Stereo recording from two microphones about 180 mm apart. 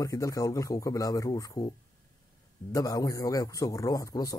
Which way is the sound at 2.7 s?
20° left (ahead or behind).